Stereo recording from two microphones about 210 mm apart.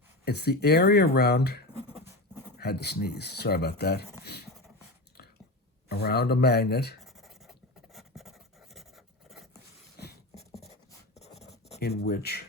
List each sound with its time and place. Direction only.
0.3 s speech: 50° left (ahead or behind)
5.9 s speech: 50° left (ahead or behind)
7.0 s writing: centre (ahead or behind)
7.9 s a sound: centre (ahead or behind)
11.1 s writing: 30° left (ahead or behind)
11.8 s speech: 50° left (ahead or behind)